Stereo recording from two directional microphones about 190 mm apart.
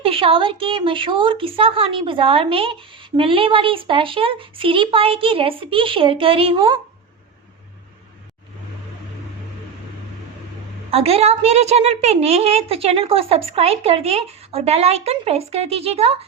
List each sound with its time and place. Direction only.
0.0 s a woman's voice: 30° right (ahead or behind)
10.9 s a woman's voice: 30° right (ahead or behind)